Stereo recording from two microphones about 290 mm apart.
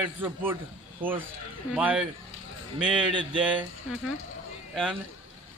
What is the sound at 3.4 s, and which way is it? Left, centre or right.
Speech, centre.